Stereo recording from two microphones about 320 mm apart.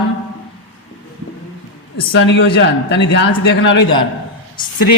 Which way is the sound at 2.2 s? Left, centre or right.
Left.